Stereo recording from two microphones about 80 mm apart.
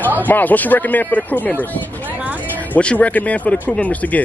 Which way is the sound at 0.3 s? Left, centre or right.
Left.